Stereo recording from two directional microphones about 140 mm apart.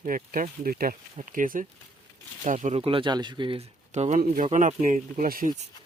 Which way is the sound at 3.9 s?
55° right (ahead or behind).